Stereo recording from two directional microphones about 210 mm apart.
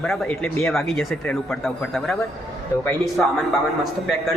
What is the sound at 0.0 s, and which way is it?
Speech, 5° left (ahead or behind).